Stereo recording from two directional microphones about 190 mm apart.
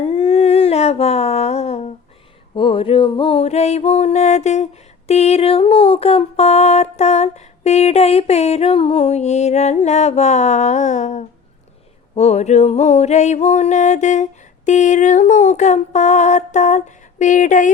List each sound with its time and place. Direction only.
0.0 s humming: 35° left (ahead or behind)
2.6 s a sound: 30° left (ahead or behind)
12.1 s music: 35° left (ahead or behind)